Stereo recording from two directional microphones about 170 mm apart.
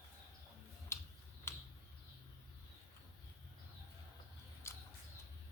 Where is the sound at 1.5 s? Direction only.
15° left (ahead or behind).